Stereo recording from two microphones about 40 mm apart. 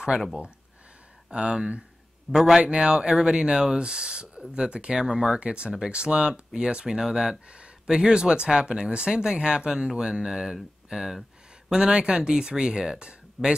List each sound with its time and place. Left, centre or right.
1.3 s speech: right
2.3 s speech: centre
2.6 s speech: right
6.9 s speech: centre
7.4 s speech: right
11.9 s speech: right